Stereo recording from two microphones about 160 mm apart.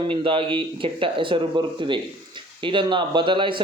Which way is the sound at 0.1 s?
35° right (ahead or behind).